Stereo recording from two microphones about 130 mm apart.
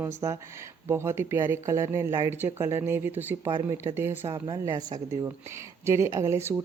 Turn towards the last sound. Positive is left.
turn(degrees=-20)  # may be behind; listen again after turning